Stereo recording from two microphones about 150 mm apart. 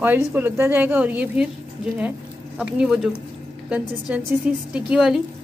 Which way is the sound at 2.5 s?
5° right (ahead or behind).